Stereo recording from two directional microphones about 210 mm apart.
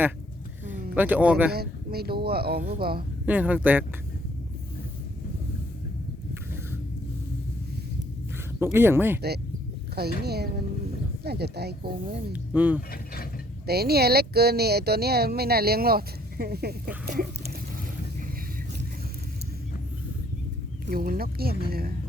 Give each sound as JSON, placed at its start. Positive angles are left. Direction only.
{"t": 0.6, "sound": "a sound", "side_deg": -35}
{"t": 0.9, "sound": "speech", "side_deg": -5}
{"t": 1.5, "sound": "speech", "side_deg": -50}
{"t": 3.2, "sound": "speech", "side_deg": -5}
{"t": 8.5, "sound": "speech", "side_deg": -10}
{"t": 9.9, "sound": "speech", "side_deg": -50}
{"t": 12.3, "sound": "speech", "side_deg": -10}
{"t": 13.7, "sound": "speech", "side_deg": -50}
{"t": 20.8, "sound": "speech", "side_deg": -45}